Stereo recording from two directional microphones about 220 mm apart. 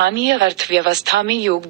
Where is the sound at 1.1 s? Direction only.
45° right (ahead or behind).